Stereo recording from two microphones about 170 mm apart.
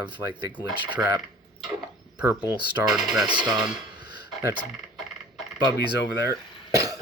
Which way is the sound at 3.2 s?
25° right (ahead or behind).